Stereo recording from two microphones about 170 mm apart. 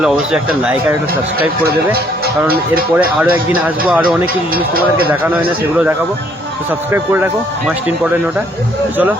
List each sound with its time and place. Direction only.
0.0 s speech: 5° right (ahead or behind)
1.6 s speech: 65° right (ahead or behind)
2.9 s speech: 10° right (ahead or behind)
4.5 s speech: 60° right (ahead or behind)
6.7 s speech: 10° right (ahead or behind)